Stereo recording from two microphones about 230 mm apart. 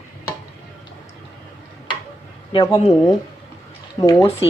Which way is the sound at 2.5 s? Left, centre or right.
Left.